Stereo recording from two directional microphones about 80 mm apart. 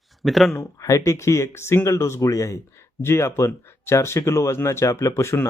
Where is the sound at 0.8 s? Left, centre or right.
Left.